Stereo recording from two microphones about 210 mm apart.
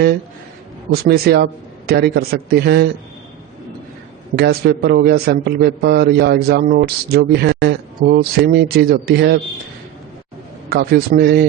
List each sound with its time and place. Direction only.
1.0 s a man's voice: 50° right (ahead or behind)
4.4 s a man's voice: 45° right (ahead or behind)
10.7 s a man's voice: 50° right (ahead or behind)